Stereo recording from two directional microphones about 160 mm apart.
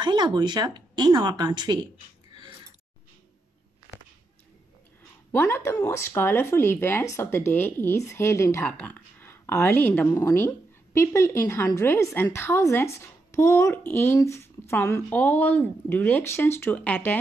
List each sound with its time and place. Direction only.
0.0 s speech: 25° right (ahead or behind)
5.3 s speech: 15° left (ahead or behind)